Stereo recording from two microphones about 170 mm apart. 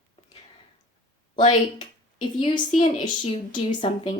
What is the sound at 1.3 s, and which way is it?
Speech, 25° left (ahead or behind).